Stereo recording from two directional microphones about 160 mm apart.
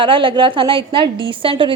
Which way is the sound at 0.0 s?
30° right (ahead or behind).